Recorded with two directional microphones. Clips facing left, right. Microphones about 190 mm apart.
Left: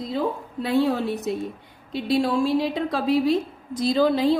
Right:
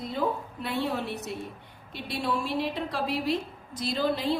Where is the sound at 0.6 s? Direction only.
90° left.